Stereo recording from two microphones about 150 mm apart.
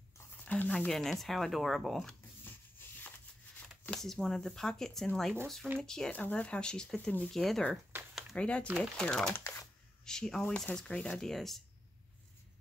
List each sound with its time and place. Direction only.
0.5 s speech: 10° left (ahead or behind)
3.8 s speech: 5° left (ahead or behind)
8.1 s a sound: centre (ahead or behind)
8.9 s speech: 5° left (ahead or behind)
9.3 s shuffling cards: 20° left (ahead or behind)
10.0 s speech: 5° left (ahead or behind)